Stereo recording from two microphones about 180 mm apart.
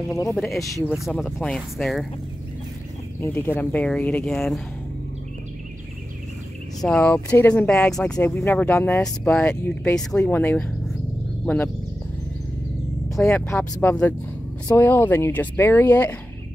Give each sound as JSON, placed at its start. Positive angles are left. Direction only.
{"t": 0.1, "sound": "speech", "side_deg": 15}
{"t": 0.9, "sound": "speech", "side_deg": 0}
{"t": 3.2, "sound": "speech", "side_deg": 10}
{"t": 6.8, "sound": "speech", "side_deg": 5}
{"t": 8.3, "sound": "speech", "side_deg": 15}
{"t": 13.1, "sound": "speech", "side_deg": 0}